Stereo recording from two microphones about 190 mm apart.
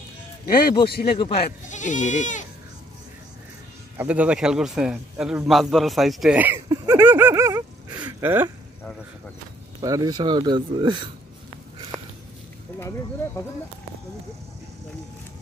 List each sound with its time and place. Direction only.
0.8 s speech: 55° left (ahead or behind)
1.1 s speech: 25° left (ahead or behind)
1.7 s speech: 40° left (ahead or behind)
4.0 s a man's voice: 5° right (ahead or behind)
6.7 s a sound: 15° right (ahead or behind)
9.8 s speech: 20° right (ahead or behind)